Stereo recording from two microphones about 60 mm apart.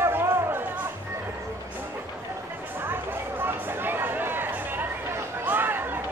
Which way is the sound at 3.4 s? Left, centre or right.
Right.